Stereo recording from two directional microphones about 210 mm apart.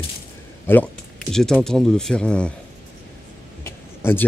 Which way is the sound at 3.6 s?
10° left (ahead or behind).